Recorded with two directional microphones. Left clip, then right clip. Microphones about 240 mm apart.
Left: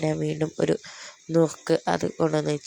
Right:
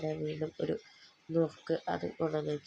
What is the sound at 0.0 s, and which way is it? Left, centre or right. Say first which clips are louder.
Speech: left 9 dB; left.